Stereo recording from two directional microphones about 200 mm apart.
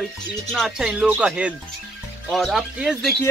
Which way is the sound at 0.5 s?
Centre (ahead or behind).